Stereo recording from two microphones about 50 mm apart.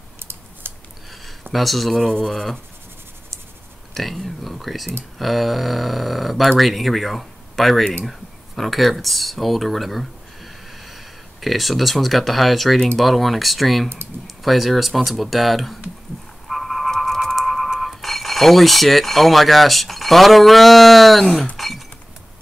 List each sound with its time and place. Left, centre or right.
0.7 s a sound: right
1.5 s mechanisms: centre
3.9 s mechanisms: centre
6.6 s speech: centre
11.4 s mechanisms: centre
14.2 s speech: centre
15.0 s mechanisms: centre
16.4 s sonar: centre
17.7 s mechanisms: centre
21.5 s rodents: centre